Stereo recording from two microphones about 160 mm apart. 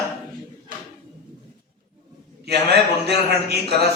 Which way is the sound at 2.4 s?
90° right.